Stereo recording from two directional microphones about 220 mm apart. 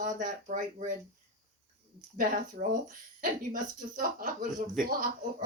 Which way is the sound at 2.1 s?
40° right (ahead or behind).